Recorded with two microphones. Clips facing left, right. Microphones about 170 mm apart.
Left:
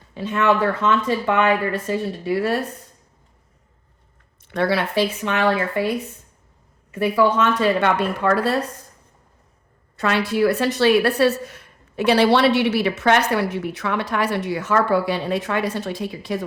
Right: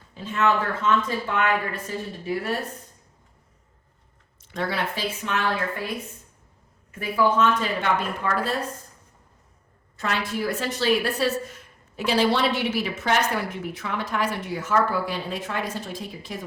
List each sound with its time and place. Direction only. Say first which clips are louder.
0.1 s a woman's voice: left 4 dB; 70° left (ahead or behind)
4.4 s a woman's voice: left 7 dB; 70° left (ahead or behind)
6.9 s a woman's voice: left 4 dB; 75° left (ahead or behind)
10.0 s a woman's voice: left 8 dB; 75° left (ahead or behind)